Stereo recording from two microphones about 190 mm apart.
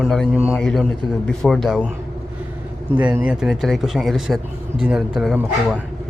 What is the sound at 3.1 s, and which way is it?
A man's voice, 10° right (ahead or behind).